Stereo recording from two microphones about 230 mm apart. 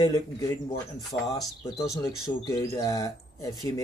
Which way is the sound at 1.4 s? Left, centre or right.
Centre.